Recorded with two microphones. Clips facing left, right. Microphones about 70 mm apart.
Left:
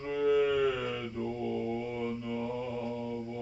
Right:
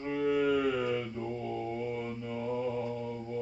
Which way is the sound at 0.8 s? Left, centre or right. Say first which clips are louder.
Right 2 dB; centre.